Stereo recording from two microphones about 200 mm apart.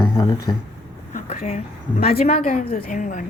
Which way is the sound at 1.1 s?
40° left (ahead or behind).